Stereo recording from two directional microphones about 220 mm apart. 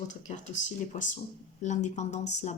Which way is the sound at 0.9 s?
35° left (ahead or behind).